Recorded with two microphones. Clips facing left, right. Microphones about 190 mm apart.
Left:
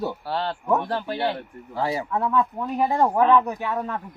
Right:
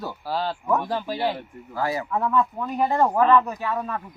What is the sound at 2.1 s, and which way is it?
Speech, 10° left (ahead or behind).